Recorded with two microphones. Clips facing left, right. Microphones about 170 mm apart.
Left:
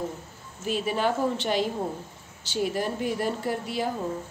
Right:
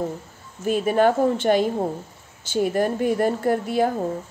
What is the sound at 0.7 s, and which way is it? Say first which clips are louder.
Speech: right 8 dB; 50° right (ahead or behind).